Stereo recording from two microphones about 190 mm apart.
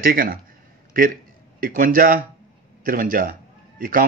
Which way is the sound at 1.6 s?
45° right (ahead or behind).